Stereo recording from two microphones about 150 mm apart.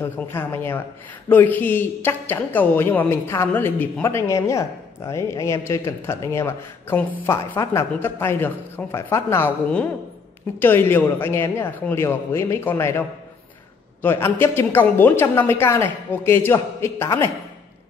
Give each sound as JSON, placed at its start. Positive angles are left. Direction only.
{"t": 0.0, "sound": "speech", "side_deg": 15}
{"t": 10.6, "sound": "speech", "side_deg": 15}
{"t": 14.0, "sound": "speech", "side_deg": 15}